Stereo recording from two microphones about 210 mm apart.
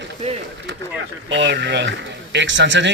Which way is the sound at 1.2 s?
60° right (ahead or behind).